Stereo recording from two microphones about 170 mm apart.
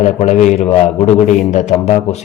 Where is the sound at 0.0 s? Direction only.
45° left (ahead or behind).